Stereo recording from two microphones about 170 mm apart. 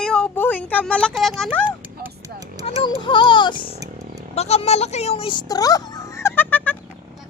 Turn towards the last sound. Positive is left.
turn(degrees=10)  # may be behind; listen again after turning